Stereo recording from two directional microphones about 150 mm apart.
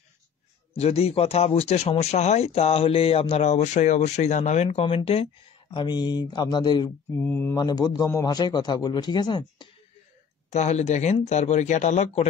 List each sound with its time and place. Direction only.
0.7 s speech: 45° left (ahead or behind)
4.6 s speech: 40° left (ahead or behind)
7.2 s speech: 15° left (ahead or behind)
7.5 s a man's voice: 25° left (ahead or behind)
10.5 s speech: 50° left (ahead or behind)